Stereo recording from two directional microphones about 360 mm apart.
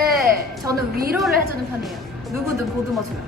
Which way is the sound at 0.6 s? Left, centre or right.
Centre.